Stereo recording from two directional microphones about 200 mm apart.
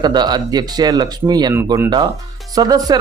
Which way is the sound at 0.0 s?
20° right (ahead or behind).